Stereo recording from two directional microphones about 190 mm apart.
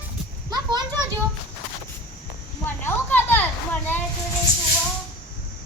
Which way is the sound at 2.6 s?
10° left (ahead or behind).